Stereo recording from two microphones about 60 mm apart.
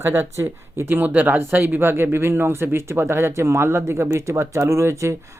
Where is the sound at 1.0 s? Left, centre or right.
Right.